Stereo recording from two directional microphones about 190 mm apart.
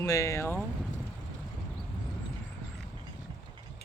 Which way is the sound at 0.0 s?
15° left (ahead or behind).